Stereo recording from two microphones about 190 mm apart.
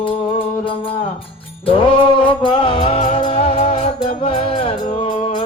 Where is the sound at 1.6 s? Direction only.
25° left (ahead or behind).